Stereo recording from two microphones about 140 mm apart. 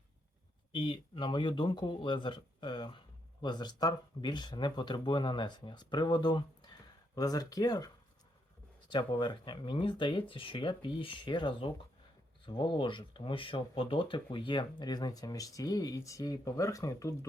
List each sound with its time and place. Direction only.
0.7 s speech: 35° left (ahead or behind)
8.9 s speech: 35° left (ahead or behind)